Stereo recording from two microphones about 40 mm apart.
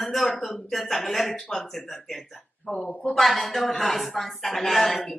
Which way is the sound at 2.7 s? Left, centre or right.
Left.